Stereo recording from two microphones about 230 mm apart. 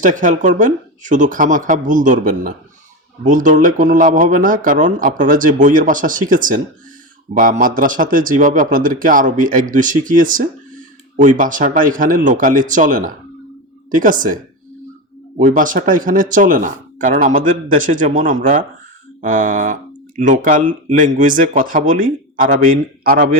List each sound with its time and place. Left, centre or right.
0.0 s speech: right
7.6 s speech: right
15.4 s speech: right